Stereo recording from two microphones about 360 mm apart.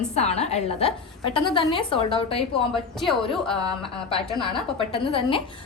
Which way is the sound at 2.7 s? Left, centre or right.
Centre.